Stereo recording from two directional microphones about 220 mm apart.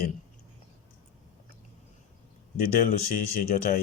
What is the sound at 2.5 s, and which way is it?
Speech, 40° left (ahead or behind).